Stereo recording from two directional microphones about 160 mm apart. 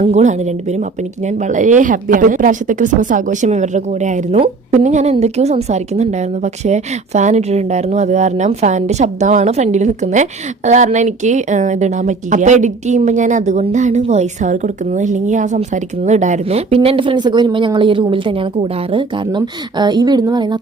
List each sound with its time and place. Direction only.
0.0 s a woman's voice: 45° right (ahead or behind); by 20.6 s 25° right (ahead or behind)